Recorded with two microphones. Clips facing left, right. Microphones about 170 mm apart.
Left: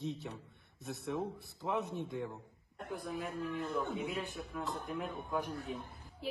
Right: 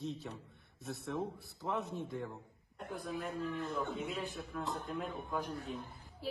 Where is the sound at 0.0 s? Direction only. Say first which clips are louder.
Left 1 dB; 20° left (ahead or behind).